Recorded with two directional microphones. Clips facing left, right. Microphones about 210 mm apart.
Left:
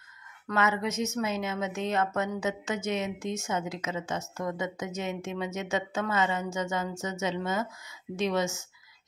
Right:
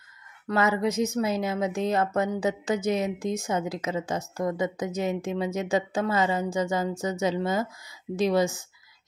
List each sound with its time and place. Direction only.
0.5 s a woman's voice: 35° right (ahead or behind)